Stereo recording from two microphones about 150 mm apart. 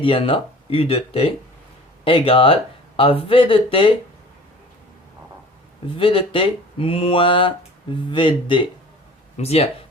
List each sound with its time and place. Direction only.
0.0 s speech: 35° left (ahead or behind)
6.0 s speech: 35° left (ahead or behind)
9.4 s speech: 45° left (ahead or behind)